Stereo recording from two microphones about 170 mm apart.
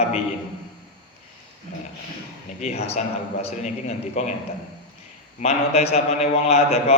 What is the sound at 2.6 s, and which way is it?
Mantra, 40° left (ahead or behind).